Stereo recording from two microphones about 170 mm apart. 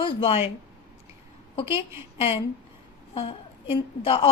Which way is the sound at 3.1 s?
30° left (ahead or behind).